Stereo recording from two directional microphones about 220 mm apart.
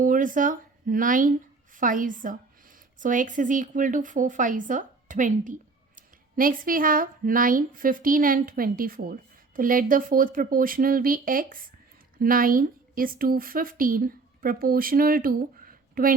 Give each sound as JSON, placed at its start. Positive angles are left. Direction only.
{"t": 0.0, "sound": "a woman's voice", "side_deg": -35}